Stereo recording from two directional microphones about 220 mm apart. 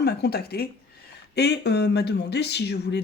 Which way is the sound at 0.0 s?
45° left (ahead or behind).